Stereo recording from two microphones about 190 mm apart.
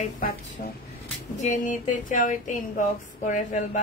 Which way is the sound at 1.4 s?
40° left (ahead or behind).